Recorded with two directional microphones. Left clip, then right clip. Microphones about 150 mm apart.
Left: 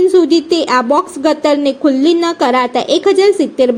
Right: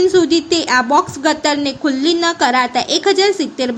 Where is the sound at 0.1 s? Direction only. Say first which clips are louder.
Left 3 dB; 20° left (ahead or behind).